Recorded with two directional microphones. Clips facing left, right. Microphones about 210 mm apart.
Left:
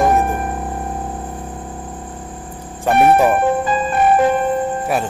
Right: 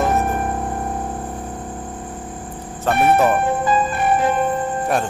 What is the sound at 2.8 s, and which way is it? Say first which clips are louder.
Speech: left 3 dB; 10° left (ahead or behind).